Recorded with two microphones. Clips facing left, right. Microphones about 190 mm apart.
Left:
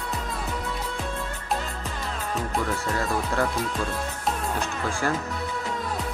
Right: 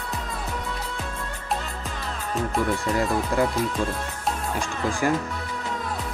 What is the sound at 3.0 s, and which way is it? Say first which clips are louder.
Speech: right 3 dB; 15° right (ahead or behind).